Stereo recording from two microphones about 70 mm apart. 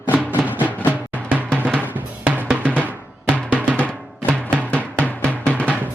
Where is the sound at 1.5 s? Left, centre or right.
Centre.